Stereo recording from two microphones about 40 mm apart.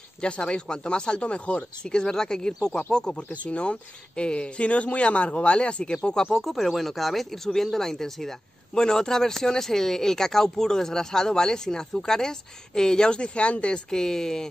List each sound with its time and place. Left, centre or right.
0.2 s speech: left
3.2 s speech: left
6.3 s speech: centre; by 13.7 s left
13.8 s speech: centre